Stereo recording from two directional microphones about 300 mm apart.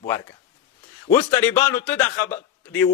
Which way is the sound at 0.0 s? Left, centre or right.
Centre.